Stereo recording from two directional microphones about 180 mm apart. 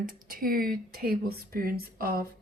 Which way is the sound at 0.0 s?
50° right (ahead or behind).